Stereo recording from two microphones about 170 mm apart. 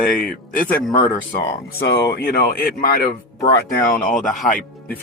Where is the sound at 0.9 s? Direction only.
50° left (ahead or behind).